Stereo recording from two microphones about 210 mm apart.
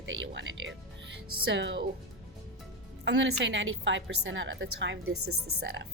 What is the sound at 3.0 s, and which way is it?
Speech, 55° right (ahead or behind).